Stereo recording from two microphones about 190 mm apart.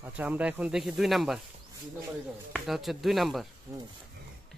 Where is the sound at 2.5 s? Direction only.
Centre (ahead or behind).